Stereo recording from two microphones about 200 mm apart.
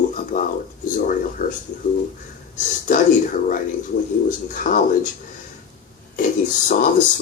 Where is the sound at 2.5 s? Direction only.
40° left (ahead or behind).